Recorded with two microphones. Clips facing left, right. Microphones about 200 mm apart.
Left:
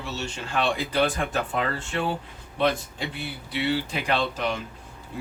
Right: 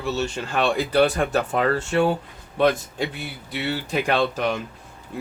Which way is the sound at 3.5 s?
45° right (ahead or behind).